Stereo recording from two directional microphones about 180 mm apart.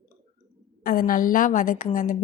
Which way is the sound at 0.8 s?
50° left (ahead or behind).